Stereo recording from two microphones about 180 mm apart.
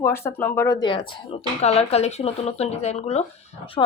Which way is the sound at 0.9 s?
25° left (ahead or behind).